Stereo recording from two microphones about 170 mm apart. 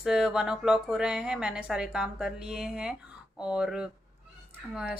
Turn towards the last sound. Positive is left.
turn(degrees=-5)  # may be behind; listen again after turning